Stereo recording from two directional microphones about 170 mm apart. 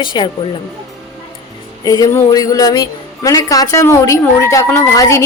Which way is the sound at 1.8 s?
20° left (ahead or behind).